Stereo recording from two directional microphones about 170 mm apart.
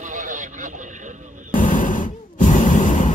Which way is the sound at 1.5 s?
50° left (ahead or behind).